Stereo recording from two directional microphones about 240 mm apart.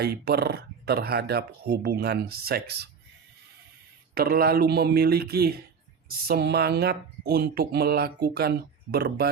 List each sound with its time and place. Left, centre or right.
0.0 s speech: right
4.1 s speech: right